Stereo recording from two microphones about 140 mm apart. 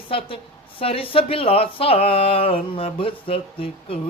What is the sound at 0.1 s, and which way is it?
Speech, 40° left (ahead or behind).